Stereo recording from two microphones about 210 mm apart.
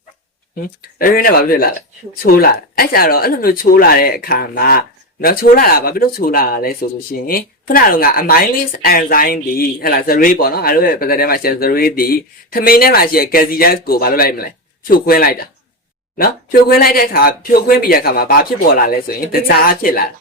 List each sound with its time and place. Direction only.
0.8 s speech: 45° left (ahead or behind)